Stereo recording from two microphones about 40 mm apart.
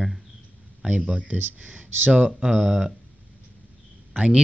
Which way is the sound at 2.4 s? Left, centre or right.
Centre.